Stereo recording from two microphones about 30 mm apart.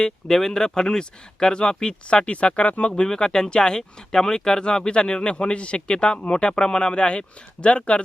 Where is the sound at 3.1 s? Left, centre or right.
Left.